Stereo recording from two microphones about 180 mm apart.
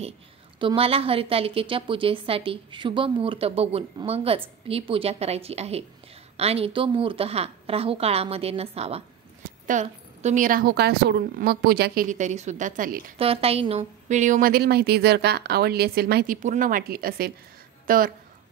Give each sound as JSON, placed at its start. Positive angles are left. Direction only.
{"t": 0.6, "sound": "a woman's voice", "side_deg": -30}
{"t": 13.2, "sound": "a woman's voice", "side_deg": -35}
{"t": 16.4, "sound": "a woman's voice", "side_deg": -50}